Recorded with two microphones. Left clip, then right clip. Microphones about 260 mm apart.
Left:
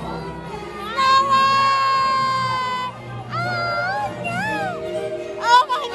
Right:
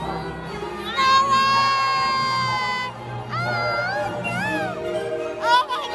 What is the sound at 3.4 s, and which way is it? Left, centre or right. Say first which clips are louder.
Music: left 1 dB; right.